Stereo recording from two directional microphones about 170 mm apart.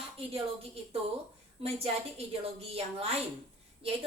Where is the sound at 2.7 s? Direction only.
35° right (ahead or behind).